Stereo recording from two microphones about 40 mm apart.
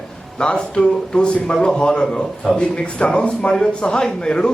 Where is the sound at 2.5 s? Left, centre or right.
Left.